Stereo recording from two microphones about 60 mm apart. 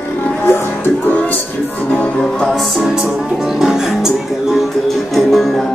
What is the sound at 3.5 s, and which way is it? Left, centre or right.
Music, centre.